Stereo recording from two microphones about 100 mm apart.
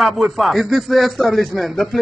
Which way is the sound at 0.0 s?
Centre (ahead or behind).